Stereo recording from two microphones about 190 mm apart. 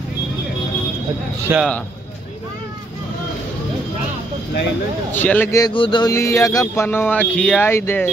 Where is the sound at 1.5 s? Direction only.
15° right (ahead or behind).